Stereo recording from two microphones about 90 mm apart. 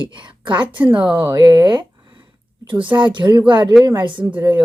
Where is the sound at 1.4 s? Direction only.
50° right (ahead or behind).